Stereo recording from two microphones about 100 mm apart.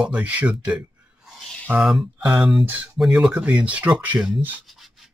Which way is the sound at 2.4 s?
Centre (ahead or behind).